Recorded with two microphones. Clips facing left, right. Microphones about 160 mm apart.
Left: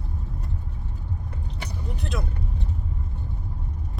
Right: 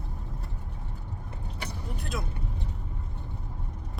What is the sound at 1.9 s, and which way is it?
Speech, 5° right (ahead or behind).